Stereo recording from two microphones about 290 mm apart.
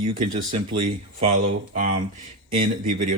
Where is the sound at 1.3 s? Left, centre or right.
Right.